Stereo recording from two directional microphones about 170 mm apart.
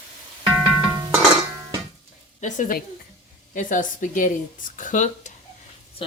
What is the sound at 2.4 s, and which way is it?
A woman's voice, 45° left (ahead or behind).